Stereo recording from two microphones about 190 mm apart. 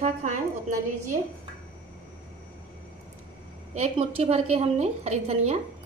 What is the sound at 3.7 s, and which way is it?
A woman's voice, 35° right (ahead or behind).